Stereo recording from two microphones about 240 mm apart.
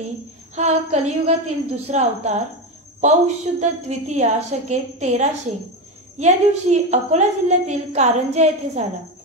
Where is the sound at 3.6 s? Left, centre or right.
Right.